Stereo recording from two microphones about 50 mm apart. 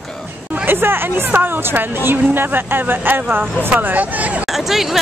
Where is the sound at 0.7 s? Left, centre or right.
Right.